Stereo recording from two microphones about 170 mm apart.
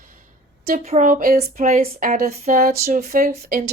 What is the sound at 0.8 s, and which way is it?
Speech, 40° right (ahead or behind).